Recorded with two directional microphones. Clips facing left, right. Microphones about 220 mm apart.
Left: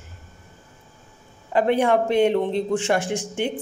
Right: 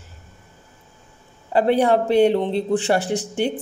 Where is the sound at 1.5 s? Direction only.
35° right (ahead or behind).